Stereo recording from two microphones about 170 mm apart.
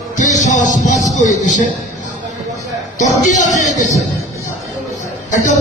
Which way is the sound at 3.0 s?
45° left (ahead or behind).